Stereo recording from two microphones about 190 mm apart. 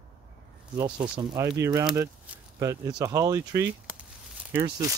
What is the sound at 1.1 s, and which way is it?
Speech, 20° right (ahead or behind).